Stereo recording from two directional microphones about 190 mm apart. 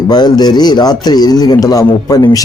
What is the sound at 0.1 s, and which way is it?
Speech, 20° left (ahead or behind).